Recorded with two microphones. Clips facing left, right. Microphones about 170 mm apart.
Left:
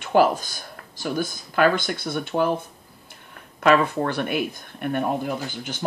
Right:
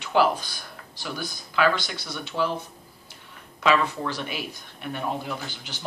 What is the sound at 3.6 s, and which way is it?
Speech, 55° left (ahead or behind).